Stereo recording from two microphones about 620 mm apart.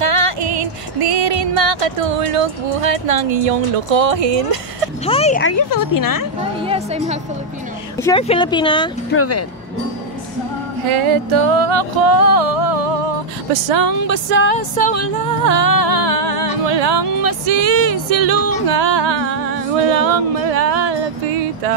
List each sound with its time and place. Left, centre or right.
0.0 s music: right
1.6 s speech: right
5.0 s speech: centre; by 6.2 s left
6.6 s a woman's voice: centre
8.0 s speech: centre
9.1 s speech: left
10.9 s speech: right
13.7 s music: right
17.2 s speech: right
18.9 s music: right